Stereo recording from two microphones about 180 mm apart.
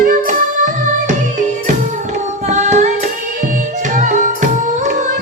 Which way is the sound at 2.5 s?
40° right (ahead or behind).